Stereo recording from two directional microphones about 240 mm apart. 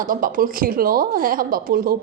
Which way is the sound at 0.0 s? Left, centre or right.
Right.